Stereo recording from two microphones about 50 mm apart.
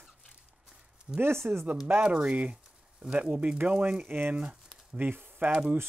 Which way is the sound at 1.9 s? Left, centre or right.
Right.